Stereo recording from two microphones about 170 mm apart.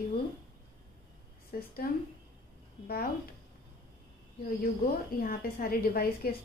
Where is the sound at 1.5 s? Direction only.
60° left (ahead or behind).